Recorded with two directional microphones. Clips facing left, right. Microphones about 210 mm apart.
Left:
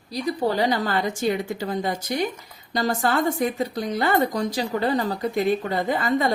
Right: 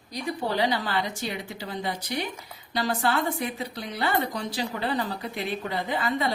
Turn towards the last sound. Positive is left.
turn(degrees=45)  # may be behind; listen again after turning